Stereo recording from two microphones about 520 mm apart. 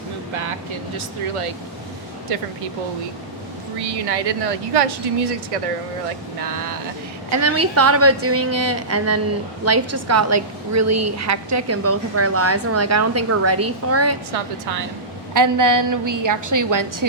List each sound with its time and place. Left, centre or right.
0.9 s speech: right
2.3 s speech: right
3.8 s speech: right
7.3 s a woman's voice: right
15.3 s a woman's voice: right